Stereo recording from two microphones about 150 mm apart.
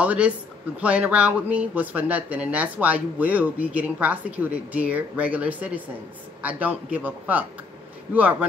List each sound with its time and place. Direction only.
0.0 s speech: 10° right (ahead or behind)